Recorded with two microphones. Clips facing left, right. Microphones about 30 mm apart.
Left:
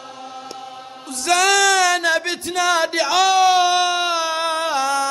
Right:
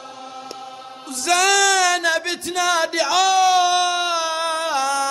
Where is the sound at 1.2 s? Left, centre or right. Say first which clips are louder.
Left 1 dB; centre.